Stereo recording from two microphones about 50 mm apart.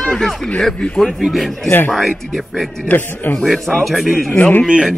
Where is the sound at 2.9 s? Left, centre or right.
Left.